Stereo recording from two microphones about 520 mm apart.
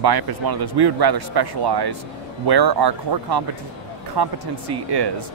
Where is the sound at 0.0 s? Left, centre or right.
Right.